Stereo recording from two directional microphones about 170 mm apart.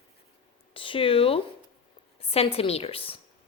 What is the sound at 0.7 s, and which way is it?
A woman's voice, 30° left (ahead or behind).